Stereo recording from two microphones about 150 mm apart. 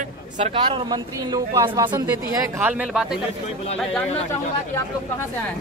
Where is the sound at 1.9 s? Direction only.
15° right (ahead or behind).